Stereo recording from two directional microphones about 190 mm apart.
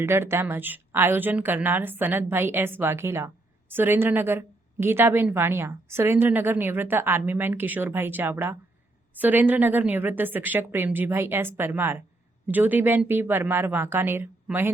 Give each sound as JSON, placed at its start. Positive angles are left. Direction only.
{"t": 0.0, "sound": "a woman's voice", "side_deg": -15}